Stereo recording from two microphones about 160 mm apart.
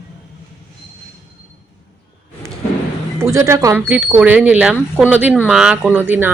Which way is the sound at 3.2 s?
15° right (ahead or behind).